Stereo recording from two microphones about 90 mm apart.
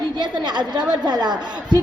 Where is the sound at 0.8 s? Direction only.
10° right (ahead or behind).